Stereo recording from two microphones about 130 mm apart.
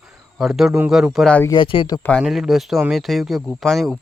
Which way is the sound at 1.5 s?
40° left (ahead or behind).